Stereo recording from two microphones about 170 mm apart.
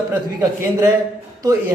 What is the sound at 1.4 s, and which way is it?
Speech, 20° right (ahead or behind).